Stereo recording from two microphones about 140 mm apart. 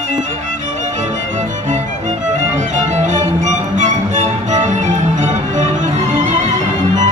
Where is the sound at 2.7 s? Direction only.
60° right (ahead or behind).